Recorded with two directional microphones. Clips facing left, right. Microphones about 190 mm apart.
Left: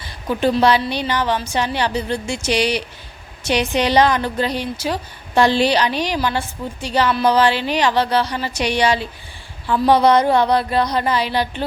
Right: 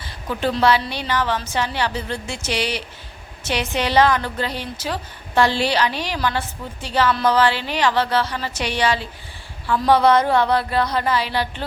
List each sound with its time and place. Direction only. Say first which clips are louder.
0.3 s a woman's voice: left 3 dB; 15° left (ahead or behind)